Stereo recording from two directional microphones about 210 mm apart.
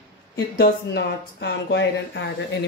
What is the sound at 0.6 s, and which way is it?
Speech, 50° left (ahead or behind).